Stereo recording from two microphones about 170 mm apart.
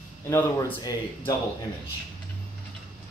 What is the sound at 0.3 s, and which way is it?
Speech, 15° left (ahead or behind).